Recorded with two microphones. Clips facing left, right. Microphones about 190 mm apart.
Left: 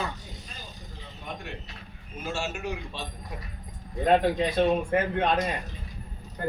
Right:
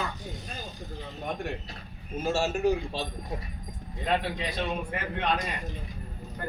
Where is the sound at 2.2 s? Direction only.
35° right (ahead or behind).